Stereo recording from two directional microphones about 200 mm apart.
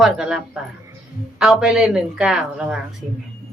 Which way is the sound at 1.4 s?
Centre (ahead or behind).